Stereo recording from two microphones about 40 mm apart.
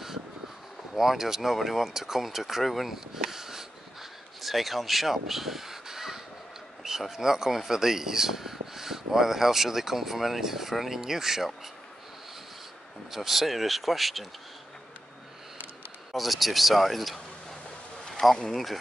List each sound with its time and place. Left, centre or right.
0.9 s speech: centre
3.3 s a sound: centre
4.4 s speech: centre
13.1 s speech: centre
16.1 s a man's voice: centre